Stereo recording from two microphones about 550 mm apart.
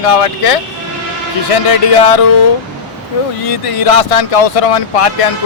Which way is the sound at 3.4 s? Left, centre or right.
Left.